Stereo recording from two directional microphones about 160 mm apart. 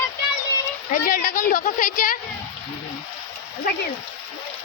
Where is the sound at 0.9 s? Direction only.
60° left (ahead or behind).